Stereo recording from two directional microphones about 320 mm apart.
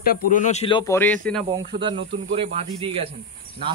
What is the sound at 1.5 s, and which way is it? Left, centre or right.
Speech, centre.